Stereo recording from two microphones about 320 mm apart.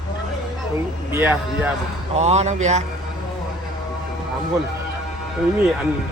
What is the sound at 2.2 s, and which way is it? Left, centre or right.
Speech, centre.